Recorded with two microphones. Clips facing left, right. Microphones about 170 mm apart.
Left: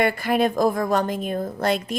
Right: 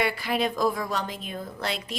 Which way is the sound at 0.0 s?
50° left (ahead or behind).